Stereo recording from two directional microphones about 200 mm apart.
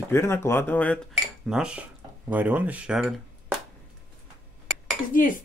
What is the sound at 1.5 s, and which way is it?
Speech, 5° right (ahead or behind).